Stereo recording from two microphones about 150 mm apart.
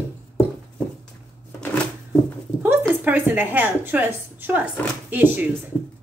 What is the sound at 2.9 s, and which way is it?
A woman's voice, 10° right (ahead or behind).